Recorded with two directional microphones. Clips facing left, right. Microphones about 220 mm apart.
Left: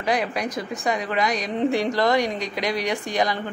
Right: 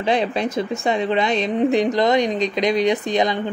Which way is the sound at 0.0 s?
25° right (ahead or behind).